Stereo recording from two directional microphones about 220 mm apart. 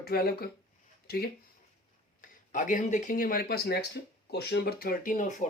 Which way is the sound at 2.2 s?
35° left (ahead or behind).